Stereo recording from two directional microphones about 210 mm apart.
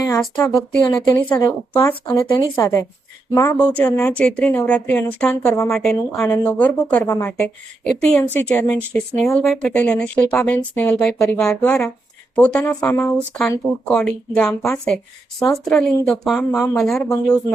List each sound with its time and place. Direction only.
0.0 s a woman's voice: 15° left (ahead or behind)